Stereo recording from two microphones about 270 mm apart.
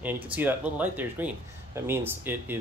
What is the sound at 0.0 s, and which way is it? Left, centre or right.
Speech, centre.